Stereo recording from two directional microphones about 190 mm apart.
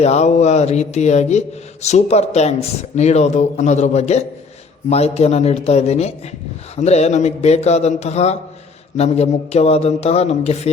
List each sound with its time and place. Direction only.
0.0 s speech: 35° left (ahead or behind)